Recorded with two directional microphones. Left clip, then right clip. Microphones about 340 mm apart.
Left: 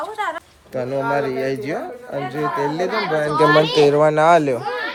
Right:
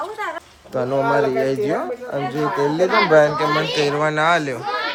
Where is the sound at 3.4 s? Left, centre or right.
Centre.